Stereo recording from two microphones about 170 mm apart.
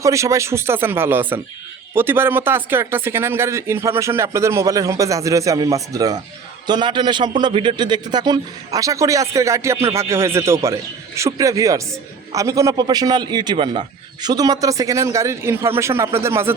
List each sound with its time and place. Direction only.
0.0 s a man's voice: 15° right (ahead or behind)